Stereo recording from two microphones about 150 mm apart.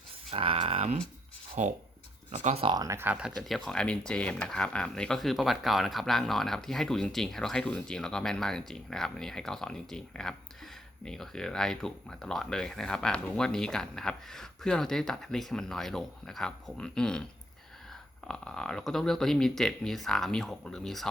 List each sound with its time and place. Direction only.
0.3 s speech: 40° right (ahead or behind)
1.6 s speech: 55° right (ahead or behind)
2.3 s speech: 45° right (ahead or behind)
2.7 s speech: 20° right (ahead or behind); by 17.2 s 5° left (ahead or behind)
18.3 s speech: 5° left (ahead or behind)